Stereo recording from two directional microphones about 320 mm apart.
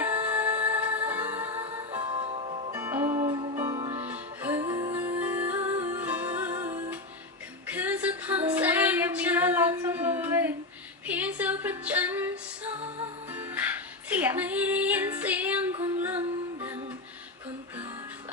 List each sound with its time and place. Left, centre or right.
0.0 s music: centre
2.0 s music: centre
11.0 s female singing: centre
13.3 s music: centre
14.1 s female singing: centre
16.0 s music: centre